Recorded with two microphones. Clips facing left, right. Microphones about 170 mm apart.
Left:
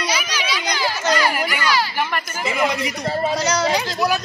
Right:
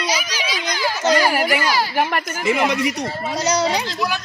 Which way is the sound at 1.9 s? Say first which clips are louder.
Right 3 dB; 60° right (ahead or behind).